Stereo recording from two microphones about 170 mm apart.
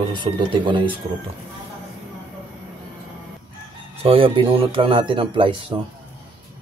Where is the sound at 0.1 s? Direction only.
30° right (ahead or behind).